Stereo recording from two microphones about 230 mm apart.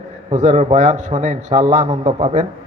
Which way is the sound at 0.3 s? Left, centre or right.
Right.